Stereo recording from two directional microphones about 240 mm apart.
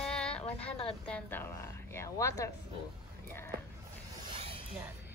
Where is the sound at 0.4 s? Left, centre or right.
Left.